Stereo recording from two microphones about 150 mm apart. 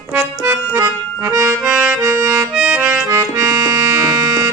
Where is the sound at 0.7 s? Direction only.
20° right (ahead or behind).